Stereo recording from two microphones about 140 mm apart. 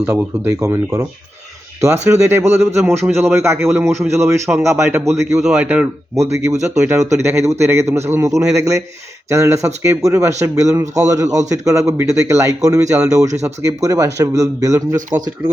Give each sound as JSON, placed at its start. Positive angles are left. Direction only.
{"t": 0.0, "sound": "speech", "side_deg": -15}
{"t": 2.0, "sound": "a man's voice", "side_deg": -20}
{"t": 5.4, "sound": "speech", "side_deg": -5}
{"t": 6.1, "sound": "a man's voice", "side_deg": -20}